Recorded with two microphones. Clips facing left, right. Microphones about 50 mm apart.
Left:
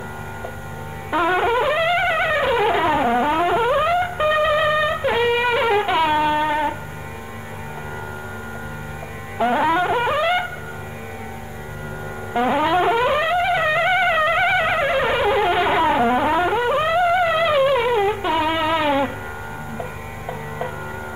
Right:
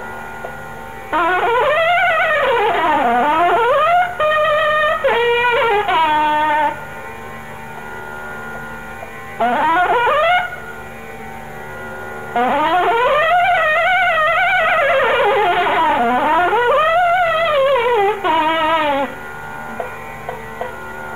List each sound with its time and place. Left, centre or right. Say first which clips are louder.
1.1 s music: right 3 dB; centre
9.4 s music: right 4 dB; centre
12.4 s music: right 3 dB; centre